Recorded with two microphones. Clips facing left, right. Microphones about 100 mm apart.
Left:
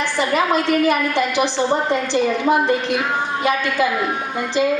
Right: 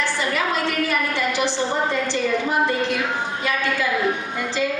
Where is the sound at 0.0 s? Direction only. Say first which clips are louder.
Left 4 dB; 20° left (ahead or behind).